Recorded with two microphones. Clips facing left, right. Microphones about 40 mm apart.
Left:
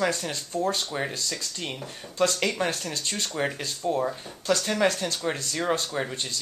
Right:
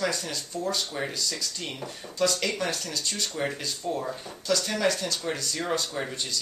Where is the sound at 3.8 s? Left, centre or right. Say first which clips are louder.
Left 6 dB; centre.